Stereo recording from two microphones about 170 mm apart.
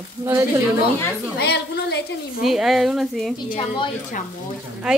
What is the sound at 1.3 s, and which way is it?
Speech, 75° left (ahead or behind).